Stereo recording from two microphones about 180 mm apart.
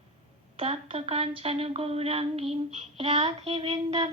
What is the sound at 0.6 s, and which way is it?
Child singing, 30° right (ahead or behind).